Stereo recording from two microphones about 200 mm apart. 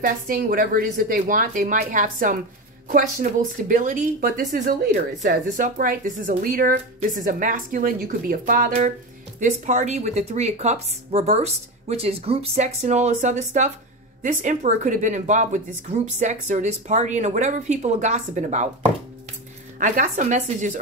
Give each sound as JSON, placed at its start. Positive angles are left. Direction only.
{"t": 0.0, "sound": "speech", "side_deg": -45}
{"t": 19.8, "sound": "speech", "side_deg": -40}